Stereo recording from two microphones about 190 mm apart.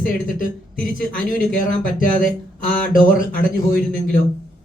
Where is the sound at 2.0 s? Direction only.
45° left (ahead or behind).